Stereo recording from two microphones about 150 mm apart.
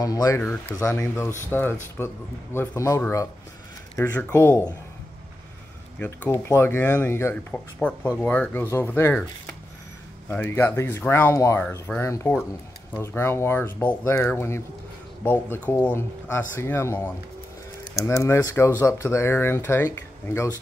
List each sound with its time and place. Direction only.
0.0 s speech: 25° left (ahead or behind)
5.9 s speech: 10° left (ahead or behind)
10.3 s speech: 15° left (ahead or behind)